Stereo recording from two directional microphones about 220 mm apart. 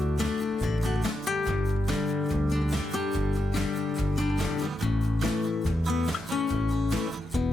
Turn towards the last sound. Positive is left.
turn(degrees=0)  # may be behind; listen again after turning